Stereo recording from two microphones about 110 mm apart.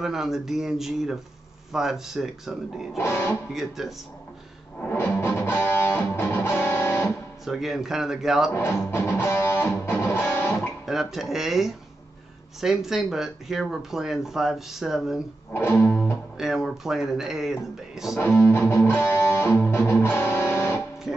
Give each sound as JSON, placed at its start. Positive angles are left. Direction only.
{"t": 0.0, "sound": "speech", "side_deg": -5}
{"t": 3.0, "sound": "music", "side_deg": 25}
{"t": 3.5, "sound": "speech", "side_deg": 0}
{"t": 4.8, "sound": "music", "side_deg": 25}
{"t": 7.4, "sound": "speech", "side_deg": -5}
{"t": 8.5, "sound": "music", "side_deg": 25}
{"t": 10.9, "sound": "speech", "side_deg": 0}
{"t": 15.5, "sound": "music", "side_deg": 25}
{"t": 16.3, "sound": "speech", "side_deg": -5}
{"t": 18.2, "sound": "music", "side_deg": 20}